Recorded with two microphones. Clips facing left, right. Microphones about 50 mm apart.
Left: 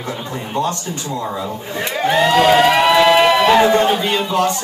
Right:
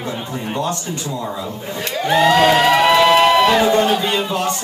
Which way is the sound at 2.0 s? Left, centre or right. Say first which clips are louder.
Even; centre.